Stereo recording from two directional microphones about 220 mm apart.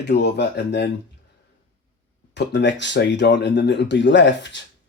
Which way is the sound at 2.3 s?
50° left (ahead or behind).